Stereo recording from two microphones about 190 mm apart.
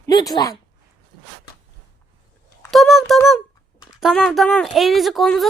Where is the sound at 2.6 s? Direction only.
Centre (ahead or behind).